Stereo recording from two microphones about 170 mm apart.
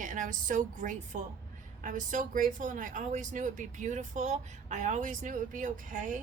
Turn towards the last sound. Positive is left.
turn(degrees=-50)  # may be behind; listen again after turning